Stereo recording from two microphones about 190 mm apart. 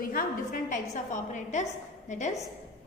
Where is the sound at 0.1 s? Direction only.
45° left (ahead or behind).